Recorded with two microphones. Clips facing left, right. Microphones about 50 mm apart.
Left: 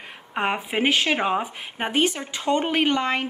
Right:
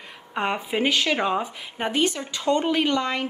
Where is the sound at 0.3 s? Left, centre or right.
Centre.